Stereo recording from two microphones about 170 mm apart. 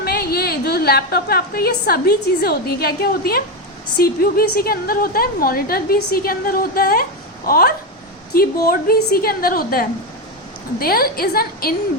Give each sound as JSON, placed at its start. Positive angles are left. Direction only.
{"t": 0.0, "sound": "a woman's voice", "side_deg": 65}